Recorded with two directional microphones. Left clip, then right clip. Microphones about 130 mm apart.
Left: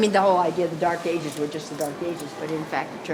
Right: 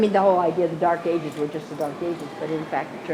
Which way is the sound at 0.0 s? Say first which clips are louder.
Right 1 dB; 45° left (ahead or behind).